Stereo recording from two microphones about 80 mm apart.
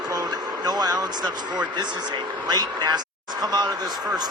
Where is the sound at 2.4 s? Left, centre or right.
Right.